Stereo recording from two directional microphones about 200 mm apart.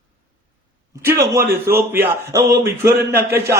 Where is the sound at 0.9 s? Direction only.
15° right (ahead or behind).